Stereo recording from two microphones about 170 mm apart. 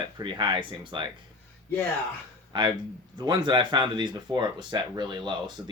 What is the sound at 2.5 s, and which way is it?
Speech, 25° right (ahead or behind).